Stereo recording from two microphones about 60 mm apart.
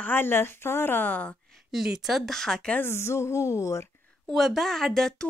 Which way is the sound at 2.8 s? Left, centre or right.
Left.